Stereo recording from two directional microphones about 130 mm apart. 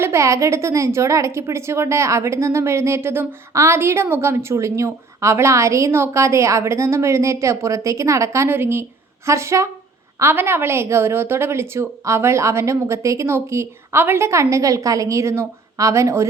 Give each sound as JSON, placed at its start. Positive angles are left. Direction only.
{"t": 0.0, "sound": "a woman's voice", "side_deg": -20}